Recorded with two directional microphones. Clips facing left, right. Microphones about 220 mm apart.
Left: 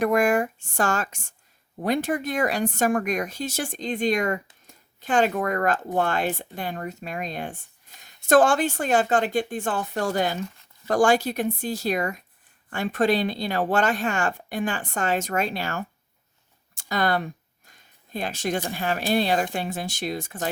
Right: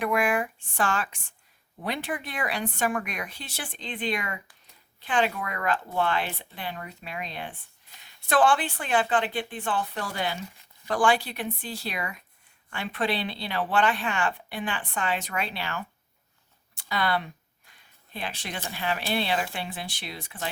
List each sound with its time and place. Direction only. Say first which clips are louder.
0.0 s speech: left 5 dB; 45° left (ahead or behind)